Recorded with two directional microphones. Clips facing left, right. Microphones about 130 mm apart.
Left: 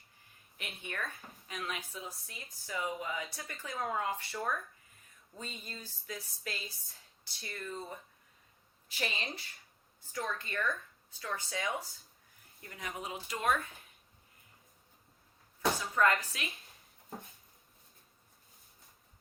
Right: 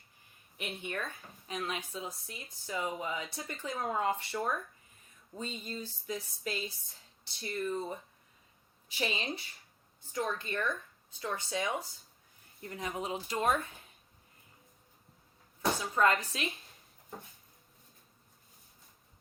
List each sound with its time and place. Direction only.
0.5 s speech: 20° right (ahead or behind)
9.0 s speech: 20° right (ahead or behind)
15.8 s speech: 25° right (ahead or behind)